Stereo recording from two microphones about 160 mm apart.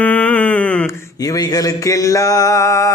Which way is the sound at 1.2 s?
25° left (ahead or behind).